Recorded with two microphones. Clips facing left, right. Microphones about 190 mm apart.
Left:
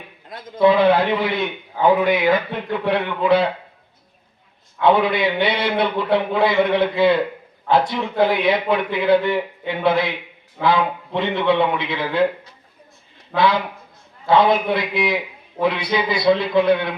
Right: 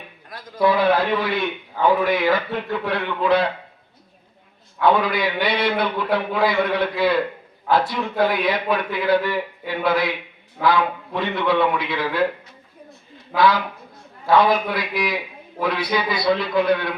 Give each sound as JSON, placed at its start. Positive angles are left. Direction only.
{"t": 0.3, "sound": "a man's voice", "side_deg": 25}
{"t": 4.8, "sound": "a man's voice", "side_deg": 25}
{"t": 13.3, "sound": "a man's voice", "side_deg": 25}